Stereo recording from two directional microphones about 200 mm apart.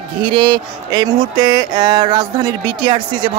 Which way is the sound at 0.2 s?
25° right (ahead or behind).